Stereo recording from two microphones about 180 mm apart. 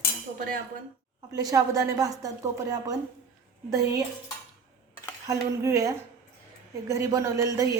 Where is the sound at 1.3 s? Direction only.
20° right (ahead or behind).